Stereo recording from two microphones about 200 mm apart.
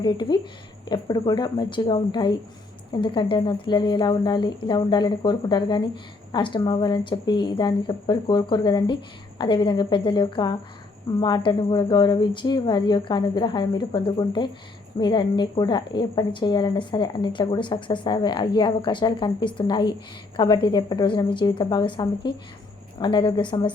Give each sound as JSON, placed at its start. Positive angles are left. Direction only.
{"t": 0.0, "sound": "a woman's voice", "side_deg": 20}